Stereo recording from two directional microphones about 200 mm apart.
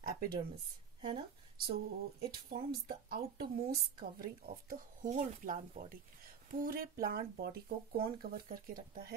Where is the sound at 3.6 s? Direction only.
45° right (ahead or behind).